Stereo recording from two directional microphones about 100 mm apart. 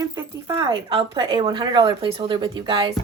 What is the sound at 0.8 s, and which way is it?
Speech, 65° right (ahead or behind).